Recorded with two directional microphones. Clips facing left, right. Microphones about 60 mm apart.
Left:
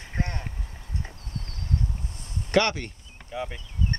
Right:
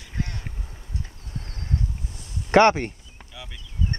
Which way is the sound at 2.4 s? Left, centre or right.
Right.